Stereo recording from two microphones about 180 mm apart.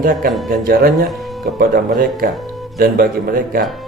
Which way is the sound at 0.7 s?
55° right (ahead or behind).